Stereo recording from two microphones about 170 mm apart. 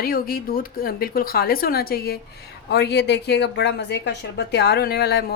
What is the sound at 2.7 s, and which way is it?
Speech, 80° left.